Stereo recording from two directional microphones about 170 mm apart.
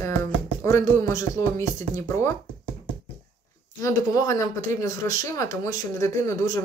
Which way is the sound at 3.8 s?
20° left (ahead or behind).